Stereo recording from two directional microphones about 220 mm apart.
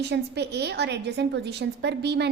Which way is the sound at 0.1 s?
50° right (ahead or behind).